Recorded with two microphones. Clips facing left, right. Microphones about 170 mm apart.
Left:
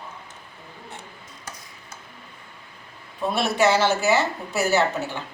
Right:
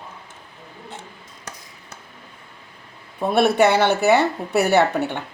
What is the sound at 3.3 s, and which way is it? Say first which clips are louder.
Speech: right 5 dB; 60° right (ahead or behind).